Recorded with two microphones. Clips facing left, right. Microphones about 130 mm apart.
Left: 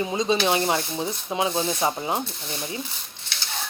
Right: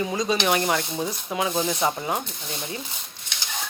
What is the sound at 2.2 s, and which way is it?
Speech, 20° right (ahead or behind).